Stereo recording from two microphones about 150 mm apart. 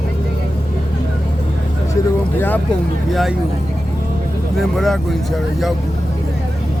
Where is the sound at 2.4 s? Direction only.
10° left (ahead or behind).